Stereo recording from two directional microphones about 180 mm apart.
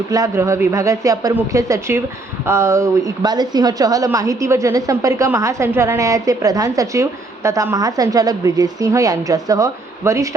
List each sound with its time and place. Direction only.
0.1 s speech: 20° right (ahead or behind)